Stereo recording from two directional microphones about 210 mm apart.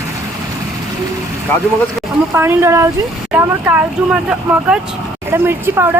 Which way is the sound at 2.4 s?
10° right (ahead or behind).